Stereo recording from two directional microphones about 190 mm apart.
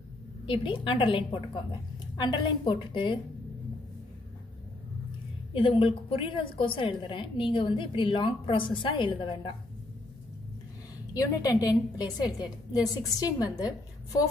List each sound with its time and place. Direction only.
0.5 s a woman's voice: 25° left (ahead or behind)
5.5 s a woman's voice: 30° left (ahead or behind)
11.1 s a woman's voice: 15° left (ahead or behind)